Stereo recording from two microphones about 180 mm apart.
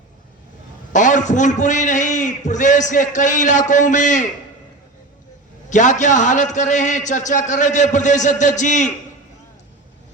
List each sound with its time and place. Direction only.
0.9 s a man's voice: 45° left (ahead or behind)
5.6 s a man's voice: 45° left (ahead or behind)